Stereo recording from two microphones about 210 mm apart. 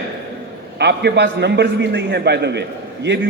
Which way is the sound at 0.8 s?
55° right (ahead or behind).